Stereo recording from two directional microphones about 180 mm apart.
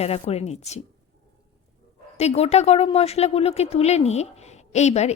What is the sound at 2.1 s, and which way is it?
Speech, 35° left (ahead or behind).